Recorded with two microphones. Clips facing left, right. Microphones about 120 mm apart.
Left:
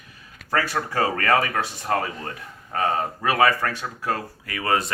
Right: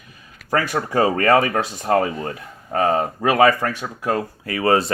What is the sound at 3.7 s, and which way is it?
Speech, 15° right (ahead or behind).